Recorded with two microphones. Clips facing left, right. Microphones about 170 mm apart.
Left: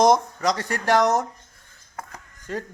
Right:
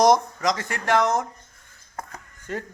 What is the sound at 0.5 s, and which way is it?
Speech, 35° left (ahead or behind).